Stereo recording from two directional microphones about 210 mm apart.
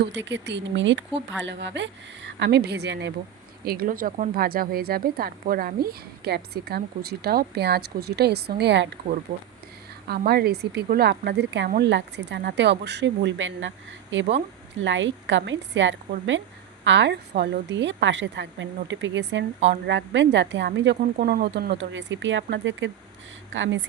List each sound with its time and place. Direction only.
0.0 s a woman's voice: 55° right (ahead or behind)
9.3 s a woman's voice: 40° right (ahead or behind); by 23.7 s 60° right (ahead or behind)